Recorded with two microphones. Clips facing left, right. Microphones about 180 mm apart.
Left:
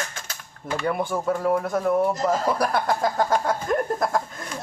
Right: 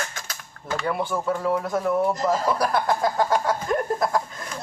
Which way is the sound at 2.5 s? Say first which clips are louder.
Even; 50° left (ahead or behind).